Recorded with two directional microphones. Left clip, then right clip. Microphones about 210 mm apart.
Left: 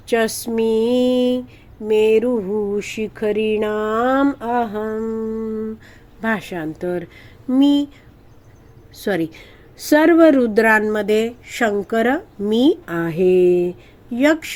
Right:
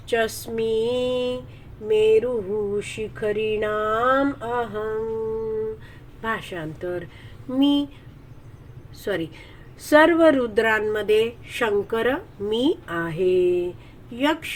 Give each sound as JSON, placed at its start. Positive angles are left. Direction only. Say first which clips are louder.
{"t": 0.1, "sound": "a woman's voice", "louder": "left 4 dB", "side_deg": 45}
{"t": 6.2, "sound": "a woman's voice", "louder": "left 5 dB", "side_deg": 50}
{"t": 9.0, "sound": "a woman's voice", "louder": "left 5 dB", "side_deg": 45}
{"t": 14.2, "sound": "a woman's voice", "louder": "left 6 dB", "side_deg": 50}